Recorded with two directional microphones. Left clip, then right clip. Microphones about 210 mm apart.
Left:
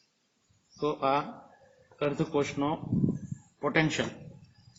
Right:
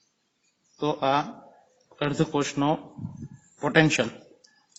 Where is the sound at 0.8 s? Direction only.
45° right (ahead or behind).